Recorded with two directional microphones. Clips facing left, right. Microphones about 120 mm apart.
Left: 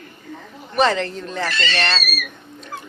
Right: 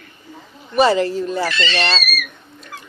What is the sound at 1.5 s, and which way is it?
Speech, 45° left (ahead or behind).